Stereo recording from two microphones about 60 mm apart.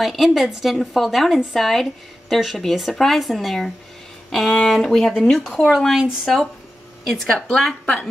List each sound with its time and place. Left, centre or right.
0.0 s a woman's voice: centre
7.2 s speech: centre